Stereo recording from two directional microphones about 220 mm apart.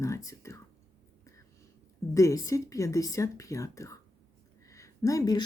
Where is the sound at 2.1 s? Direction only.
15° left (ahead or behind).